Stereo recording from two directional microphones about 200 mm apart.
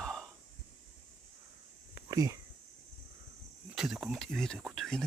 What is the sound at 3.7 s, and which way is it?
Speech, 5° right (ahead or behind).